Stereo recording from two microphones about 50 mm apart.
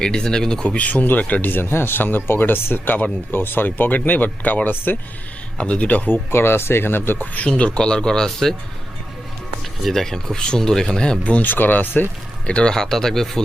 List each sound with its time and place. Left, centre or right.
0.0 s speech: centre; by 4.9 s left
5.5 s speech: left
6.1 s speech: left
7.5 s speech: centre
9.8 s speech: centre
11.2 s speech: left
12.5 s speech: left
12.7 s speech: centre